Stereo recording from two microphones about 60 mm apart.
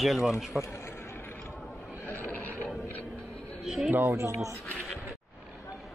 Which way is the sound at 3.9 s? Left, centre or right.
Right.